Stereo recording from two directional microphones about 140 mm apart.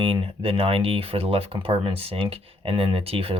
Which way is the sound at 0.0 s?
40° right (ahead or behind).